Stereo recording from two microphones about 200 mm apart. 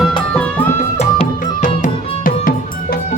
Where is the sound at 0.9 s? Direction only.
35° left (ahead or behind).